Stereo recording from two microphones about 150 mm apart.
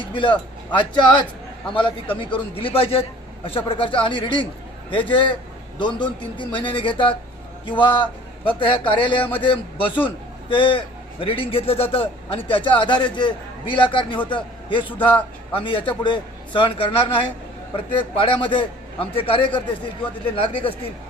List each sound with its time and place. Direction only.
0.1 s a man's voice: 35° left (ahead or behind)